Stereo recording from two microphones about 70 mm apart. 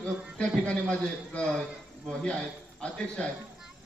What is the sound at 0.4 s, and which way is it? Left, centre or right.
A man's voice, centre.